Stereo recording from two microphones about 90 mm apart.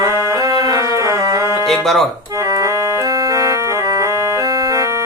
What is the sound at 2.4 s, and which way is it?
Music, 40° right (ahead or behind).